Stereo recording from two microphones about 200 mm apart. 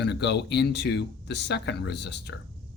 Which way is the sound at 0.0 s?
60° left (ahead or behind).